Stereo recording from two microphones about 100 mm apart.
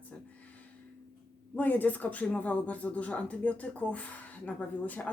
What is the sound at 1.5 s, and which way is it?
Speech, 15° left (ahead or behind).